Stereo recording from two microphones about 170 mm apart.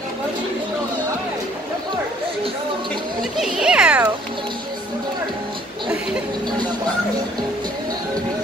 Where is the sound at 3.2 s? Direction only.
5° right (ahead or behind).